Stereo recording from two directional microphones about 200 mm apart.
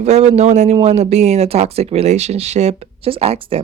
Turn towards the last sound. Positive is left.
turn(degrees=-30)  # may be behind; listen again after turning